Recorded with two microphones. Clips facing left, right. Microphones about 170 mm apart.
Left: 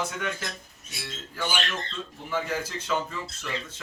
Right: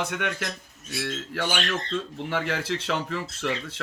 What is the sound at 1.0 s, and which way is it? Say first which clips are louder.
Speech: right 4 dB; 75° right (ahead or behind).